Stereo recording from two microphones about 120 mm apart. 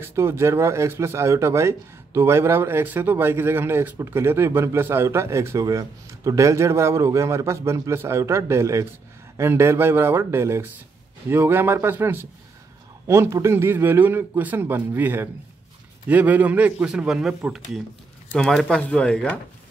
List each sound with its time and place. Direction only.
0.0 s a man's voice: 20° right (ahead or behind); by 19.3 s 5° left (ahead or behind)